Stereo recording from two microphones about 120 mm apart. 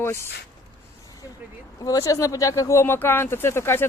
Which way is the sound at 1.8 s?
30° left (ahead or behind).